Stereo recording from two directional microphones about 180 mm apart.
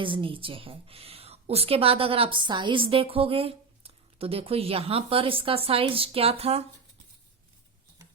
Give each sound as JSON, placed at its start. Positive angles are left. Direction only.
{"t": 0.0, "sound": "speech", "side_deg": -30}